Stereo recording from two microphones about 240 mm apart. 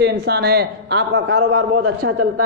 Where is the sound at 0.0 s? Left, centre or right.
Right.